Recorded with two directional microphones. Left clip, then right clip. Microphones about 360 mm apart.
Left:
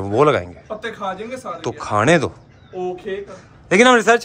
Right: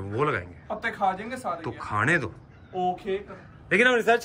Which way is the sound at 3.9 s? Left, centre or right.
Left.